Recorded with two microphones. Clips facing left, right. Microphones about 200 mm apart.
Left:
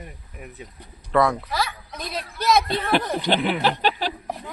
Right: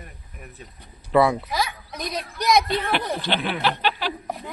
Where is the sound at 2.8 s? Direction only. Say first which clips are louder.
Left 3 dB; 40° left (ahead or behind).